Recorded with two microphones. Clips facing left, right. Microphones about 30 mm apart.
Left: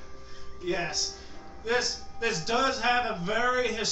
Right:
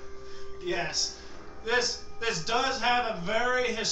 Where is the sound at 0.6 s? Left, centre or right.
Centre.